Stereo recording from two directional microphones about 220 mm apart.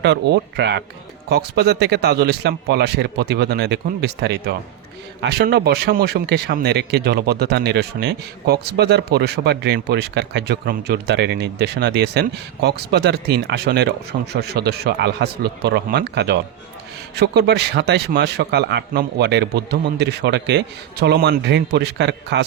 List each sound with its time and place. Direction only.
0.0 s speech: 50° right (ahead or behind)